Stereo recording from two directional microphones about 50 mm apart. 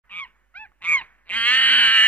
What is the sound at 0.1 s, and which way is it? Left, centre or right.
Goose, left.